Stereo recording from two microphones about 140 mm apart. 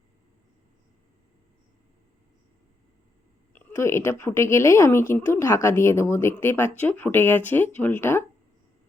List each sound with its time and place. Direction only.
3.5 s a woman's voice: 15° left (ahead or behind)